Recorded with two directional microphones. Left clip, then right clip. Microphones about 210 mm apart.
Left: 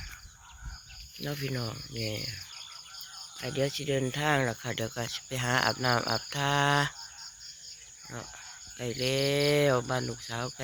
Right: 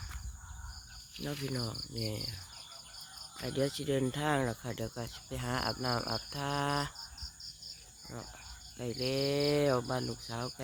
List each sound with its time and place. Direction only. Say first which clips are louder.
1.3 s speech: left 3 dB; 5° right (ahead or behind)
3.4 s speech: left 3 dB; 20° right (ahead or behind); by 6.9 s centre (ahead or behind)
8.8 s speech: left 4 dB; 5° right (ahead or behind)